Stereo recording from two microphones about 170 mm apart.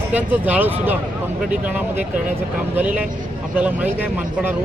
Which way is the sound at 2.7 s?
10° right (ahead or behind).